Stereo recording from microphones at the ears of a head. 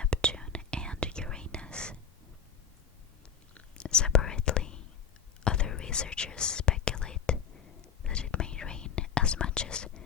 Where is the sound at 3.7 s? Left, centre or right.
Left.